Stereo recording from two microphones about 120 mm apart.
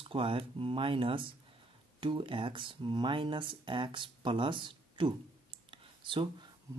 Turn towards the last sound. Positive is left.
turn(degrees=-45)  # may be behind; listen again after turning